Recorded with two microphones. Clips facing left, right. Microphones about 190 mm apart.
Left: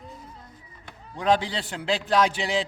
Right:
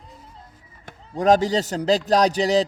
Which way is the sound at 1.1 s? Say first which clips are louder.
Right 6 dB; 45° right (ahead or behind).